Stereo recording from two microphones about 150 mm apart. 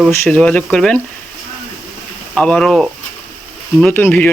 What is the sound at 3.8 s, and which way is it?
Speech, 10° left (ahead or behind).